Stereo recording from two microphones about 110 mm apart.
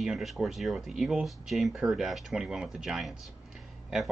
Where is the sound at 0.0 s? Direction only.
5° right (ahead or behind).